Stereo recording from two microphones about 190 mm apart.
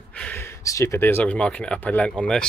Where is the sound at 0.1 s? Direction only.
10° left (ahead or behind).